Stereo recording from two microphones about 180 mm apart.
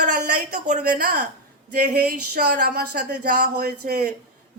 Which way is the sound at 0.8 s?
55° right (ahead or behind).